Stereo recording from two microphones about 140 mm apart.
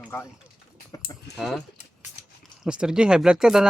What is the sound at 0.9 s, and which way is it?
Speech, 25° left (ahead or behind).